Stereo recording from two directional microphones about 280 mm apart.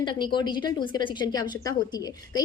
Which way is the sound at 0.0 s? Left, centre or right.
Centre.